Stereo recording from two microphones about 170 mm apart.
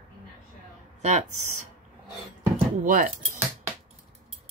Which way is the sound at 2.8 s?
55° right (ahead or behind).